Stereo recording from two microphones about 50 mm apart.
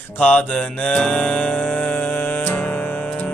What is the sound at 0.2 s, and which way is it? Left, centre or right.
Mantra, left.